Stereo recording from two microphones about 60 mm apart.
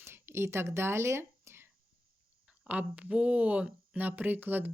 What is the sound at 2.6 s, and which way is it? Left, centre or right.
Speech, right.